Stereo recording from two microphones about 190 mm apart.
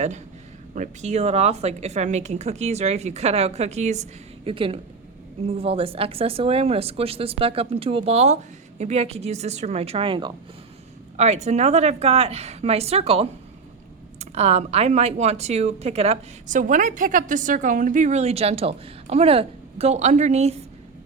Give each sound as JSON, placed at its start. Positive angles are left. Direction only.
{"t": 0.7, "sound": "speech", "side_deg": -40}
{"t": 11.2, "sound": "speech", "side_deg": -35}